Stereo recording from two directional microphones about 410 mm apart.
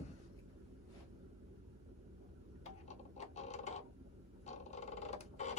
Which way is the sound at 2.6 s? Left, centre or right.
Centre.